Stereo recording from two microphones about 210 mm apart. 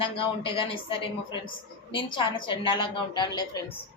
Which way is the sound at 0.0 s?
25° left (ahead or behind).